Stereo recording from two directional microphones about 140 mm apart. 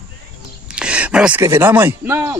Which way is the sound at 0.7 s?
5° right (ahead or behind).